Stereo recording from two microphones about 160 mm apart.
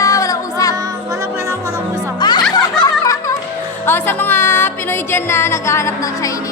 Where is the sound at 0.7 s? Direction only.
20° right (ahead or behind).